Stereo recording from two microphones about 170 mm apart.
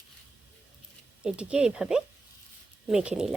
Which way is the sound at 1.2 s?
5° right (ahead or behind).